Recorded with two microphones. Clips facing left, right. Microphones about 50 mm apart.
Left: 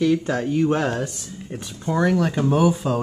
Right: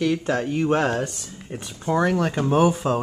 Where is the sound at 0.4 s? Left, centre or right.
Centre.